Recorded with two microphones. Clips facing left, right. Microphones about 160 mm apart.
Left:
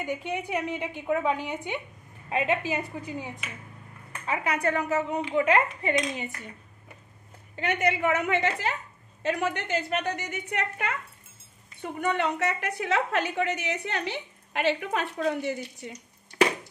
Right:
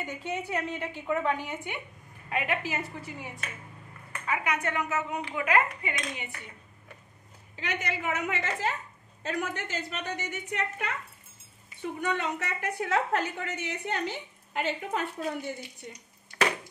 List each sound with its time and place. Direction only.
0.0 s a woman's voice: 15° left (ahead or behind)
4.3 s a woman's voice: 35° left (ahead or behind)
7.5 s a woman's voice: 55° left (ahead or behind); by 15.5 s 85° left